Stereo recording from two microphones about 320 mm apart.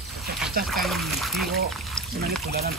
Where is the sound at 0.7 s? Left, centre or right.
Centre.